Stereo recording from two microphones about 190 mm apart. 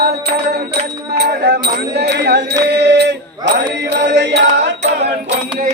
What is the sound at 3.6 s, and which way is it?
Chant, 70° right (ahead or behind).